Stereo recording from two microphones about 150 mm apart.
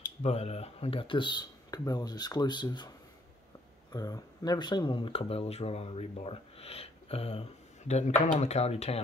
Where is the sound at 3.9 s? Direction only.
25° left (ahead or behind).